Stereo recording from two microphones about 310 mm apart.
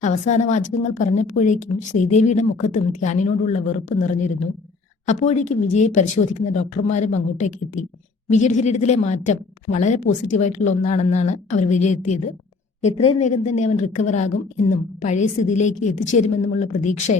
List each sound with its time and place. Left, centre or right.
0.0 s speech: left